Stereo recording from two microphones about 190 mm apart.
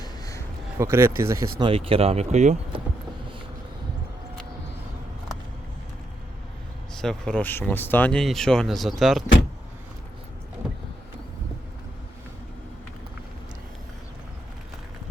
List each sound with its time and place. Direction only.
0.0 s a sound: 15° left (ahead or behind)
0.8 s speech: 15° right (ahead or behind); by 2.8 s 40° right (ahead or behind)
6.9 s speech: centre (ahead or behind)